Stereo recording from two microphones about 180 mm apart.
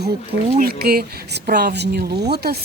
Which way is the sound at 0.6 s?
60° right (ahead or behind).